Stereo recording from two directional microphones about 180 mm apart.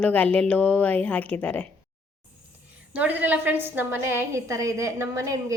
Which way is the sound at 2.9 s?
10° right (ahead or behind).